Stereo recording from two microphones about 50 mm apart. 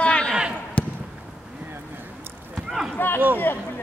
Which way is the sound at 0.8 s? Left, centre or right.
Left.